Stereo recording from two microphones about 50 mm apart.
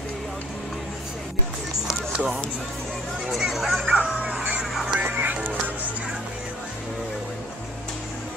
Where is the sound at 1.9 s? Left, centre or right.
Centre.